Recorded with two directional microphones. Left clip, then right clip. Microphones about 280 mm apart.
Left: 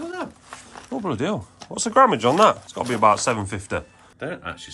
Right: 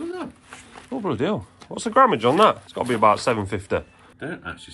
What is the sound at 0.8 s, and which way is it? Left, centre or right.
Speech, centre.